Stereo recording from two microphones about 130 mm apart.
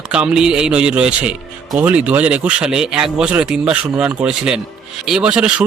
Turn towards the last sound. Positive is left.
turn(degrees=-10)  # may be behind; listen again after turning